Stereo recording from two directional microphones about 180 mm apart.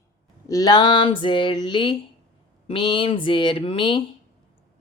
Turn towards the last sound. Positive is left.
turn(degrees=30)  # may be behind; listen again after turning